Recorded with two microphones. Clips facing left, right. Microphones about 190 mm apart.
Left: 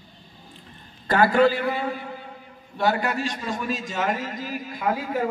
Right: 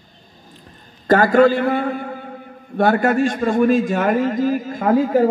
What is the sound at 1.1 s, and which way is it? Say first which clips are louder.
A man's voice: right 6 dB; 45° right (ahead or behind).